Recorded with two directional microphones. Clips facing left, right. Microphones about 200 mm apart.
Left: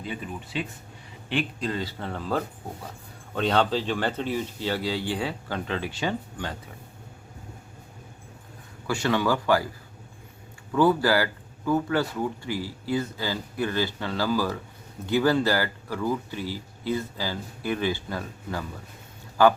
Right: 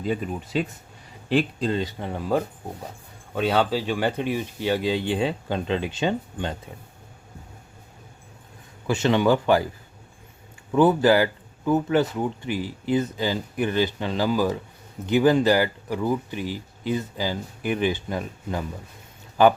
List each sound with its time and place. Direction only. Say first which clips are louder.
0.0 s speech: right 7 dB; 40° right (ahead or behind)
1.8 s speech: right 3 dB; 15° right (ahead or behind)
8.9 s speech: right 5 dB; 20° right (ahead or behind)
10.7 s speech: right 4 dB; 20° right (ahead or behind)